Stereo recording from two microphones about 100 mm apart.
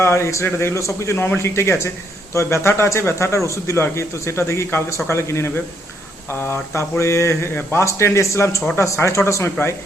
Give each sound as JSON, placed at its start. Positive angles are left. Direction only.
{"t": 0.0, "sound": "speech", "side_deg": 25}